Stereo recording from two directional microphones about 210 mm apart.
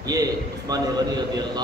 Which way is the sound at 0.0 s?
20° right (ahead or behind).